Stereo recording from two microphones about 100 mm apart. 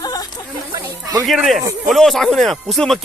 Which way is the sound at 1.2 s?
5° right (ahead or behind).